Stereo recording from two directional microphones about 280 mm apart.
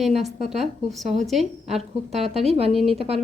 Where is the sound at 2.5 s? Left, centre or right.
Right.